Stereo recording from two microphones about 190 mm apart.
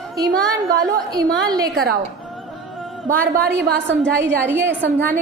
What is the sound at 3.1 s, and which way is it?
Speech, 50° right (ahead or behind).